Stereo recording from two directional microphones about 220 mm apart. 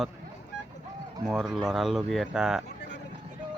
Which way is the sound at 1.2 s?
Centre (ahead or behind).